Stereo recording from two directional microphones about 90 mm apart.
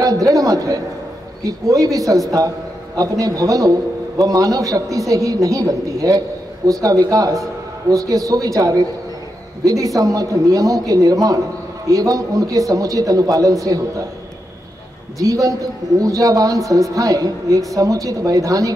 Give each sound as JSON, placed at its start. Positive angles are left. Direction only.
{"t": 0.0, "sound": "a sound", "side_deg": -40}
{"t": 1.4, "sound": "a man's voice", "side_deg": -40}
{"t": 15.1, "sound": "a man's voice", "side_deg": -40}